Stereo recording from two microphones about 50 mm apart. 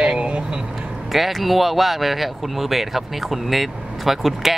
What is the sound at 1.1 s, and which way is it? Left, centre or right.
Speech, centre.